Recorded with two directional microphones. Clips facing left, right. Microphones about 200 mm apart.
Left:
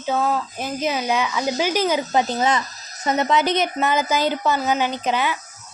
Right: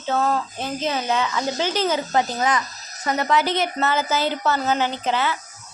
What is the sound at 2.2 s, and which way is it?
Speech, 25° left (ahead or behind).